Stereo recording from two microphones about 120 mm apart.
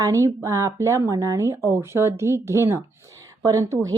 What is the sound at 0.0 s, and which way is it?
Speech, 25° right (ahead or behind).